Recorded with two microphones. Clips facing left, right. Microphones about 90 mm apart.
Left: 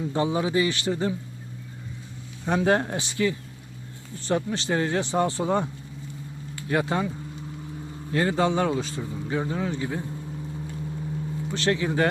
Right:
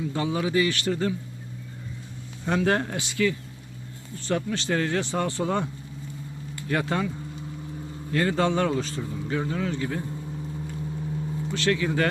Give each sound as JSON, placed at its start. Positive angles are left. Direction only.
{"t": 0.1, "sound": "speech", "side_deg": 25}
{"t": 2.5, "sound": "speech", "side_deg": 20}
{"t": 6.7, "sound": "speech", "side_deg": 20}
{"t": 8.1, "sound": "speech", "side_deg": 20}
{"t": 11.5, "sound": "speech", "side_deg": 25}